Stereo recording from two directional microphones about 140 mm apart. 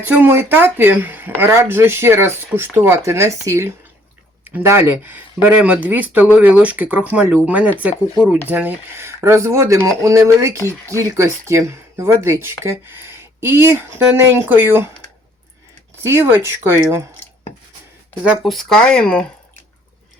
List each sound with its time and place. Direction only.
0.0 s speech: 15° right (ahead or behind)
16.0 s speech: 15° right (ahead or behind)
18.3 s speech: centre (ahead or behind)